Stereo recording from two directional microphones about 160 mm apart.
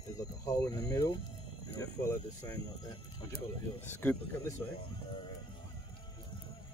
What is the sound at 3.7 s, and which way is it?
Speech, 15° left (ahead or behind).